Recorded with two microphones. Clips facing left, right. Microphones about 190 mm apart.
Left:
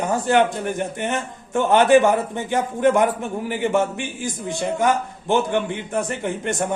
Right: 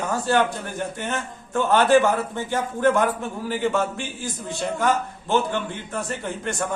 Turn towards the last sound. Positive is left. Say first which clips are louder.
# left 4 dB
turn(degrees=20)  # may be behind; listen again after turning